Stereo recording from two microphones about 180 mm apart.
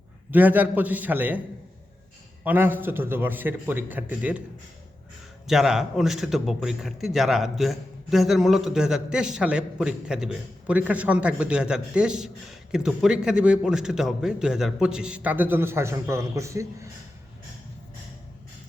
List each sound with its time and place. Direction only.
0.3 s a man's voice: 10° right (ahead or behind)
2.4 s a man's voice: 10° right (ahead or behind)
5.5 s a man's voice: centre (ahead or behind)